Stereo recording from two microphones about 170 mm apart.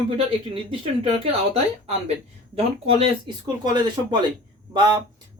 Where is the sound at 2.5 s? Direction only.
35° right (ahead or behind).